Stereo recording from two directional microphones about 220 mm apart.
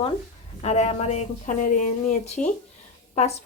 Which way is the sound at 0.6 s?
30° left (ahead or behind).